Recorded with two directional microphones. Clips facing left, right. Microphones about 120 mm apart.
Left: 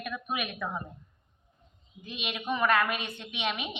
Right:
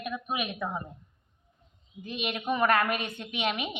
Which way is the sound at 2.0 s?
40° right (ahead or behind).